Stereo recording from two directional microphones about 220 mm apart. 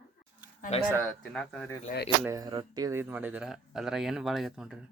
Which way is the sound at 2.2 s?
15° right (ahead or behind).